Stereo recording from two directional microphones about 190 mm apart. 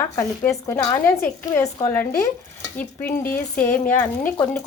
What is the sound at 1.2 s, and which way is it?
A woman's voice, 15° left (ahead or behind).